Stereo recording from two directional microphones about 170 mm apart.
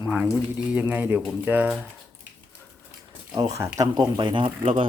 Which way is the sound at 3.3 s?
20° right (ahead or behind).